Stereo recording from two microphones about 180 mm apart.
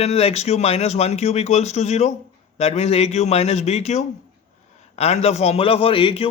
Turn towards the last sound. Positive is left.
turn(degrees=30)  # may be behind; listen again after turning